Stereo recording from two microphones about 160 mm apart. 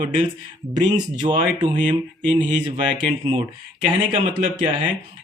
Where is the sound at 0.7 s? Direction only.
25° right (ahead or behind).